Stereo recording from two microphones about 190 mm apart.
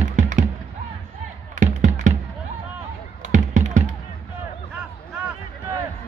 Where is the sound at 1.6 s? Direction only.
40° right (ahead or behind).